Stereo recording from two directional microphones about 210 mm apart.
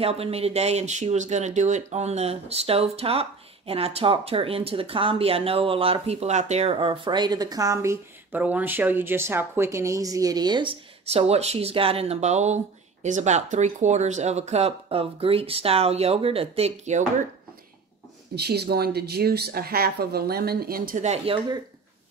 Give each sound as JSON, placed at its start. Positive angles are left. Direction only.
{"t": 0.0, "sound": "speech", "side_deg": -30}
{"t": 18.3, "sound": "speech", "side_deg": -50}